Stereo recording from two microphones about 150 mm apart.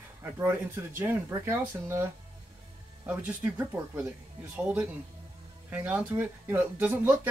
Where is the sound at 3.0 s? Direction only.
10° right (ahead or behind).